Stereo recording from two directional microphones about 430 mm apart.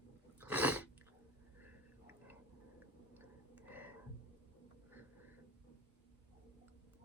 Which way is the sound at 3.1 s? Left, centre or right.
Centre.